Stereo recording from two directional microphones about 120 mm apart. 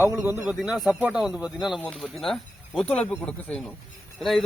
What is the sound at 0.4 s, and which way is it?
Speech, 10° right (ahead or behind).